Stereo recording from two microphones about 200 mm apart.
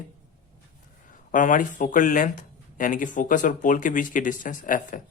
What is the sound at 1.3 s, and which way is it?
Speech, 40° left (ahead or behind).